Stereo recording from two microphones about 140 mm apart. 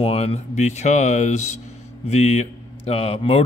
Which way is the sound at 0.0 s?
45° left (ahead or behind).